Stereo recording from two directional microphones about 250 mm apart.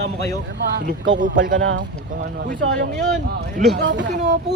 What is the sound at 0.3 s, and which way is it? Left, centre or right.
Speech, right.